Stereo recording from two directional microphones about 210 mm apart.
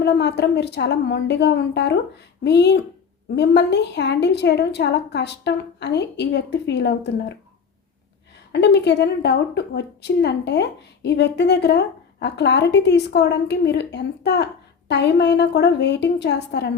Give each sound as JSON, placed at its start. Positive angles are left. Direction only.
{"t": 0.0, "sound": "a woman's voice", "side_deg": 50}
{"t": 8.5, "sound": "a woman's voice", "side_deg": 55}